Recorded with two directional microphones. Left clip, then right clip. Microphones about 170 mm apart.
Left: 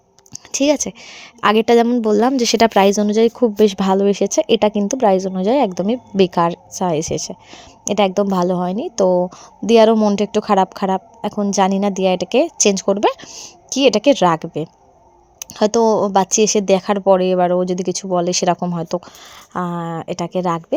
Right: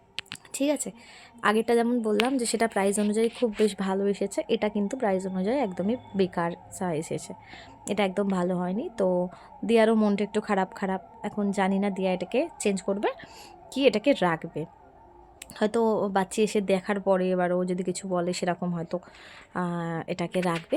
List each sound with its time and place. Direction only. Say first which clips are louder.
0.5 s speech: left 11 dB; 35° left (ahead or behind)
9.9 s speech: left 10 dB; 25° left (ahead or behind)
10.2 s speech: left 12 dB; 35° left (ahead or behind)
13.2 s speech: left 11 dB; 20° left (ahead or behind)
13.7 s speech: left 9 dB; 35° left (ahead or behind)
19.5 s speech: left 8 dB; 20° left (ahead or behind)